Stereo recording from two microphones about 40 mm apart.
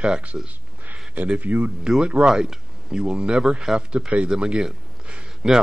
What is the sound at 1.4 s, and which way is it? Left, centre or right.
Speech, right.